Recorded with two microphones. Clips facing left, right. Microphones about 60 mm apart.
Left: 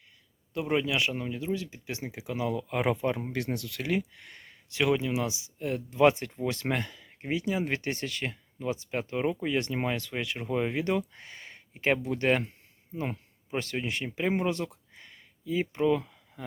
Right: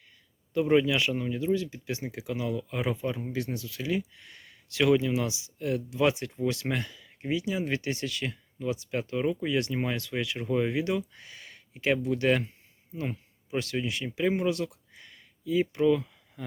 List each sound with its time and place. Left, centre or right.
0.5 s speech: centre
0.9 s speech: left
1.6 s speech: left
2.5 s speech: left
2.9 s speech: left
4.7 s speech: left
10.8 s speech: left
15.1 s a sound: left